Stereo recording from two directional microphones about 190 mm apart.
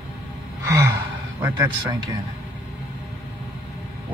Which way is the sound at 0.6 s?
15° right (ahead or behind).